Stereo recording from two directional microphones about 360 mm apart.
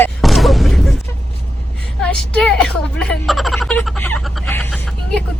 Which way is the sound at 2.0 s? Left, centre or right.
Centre.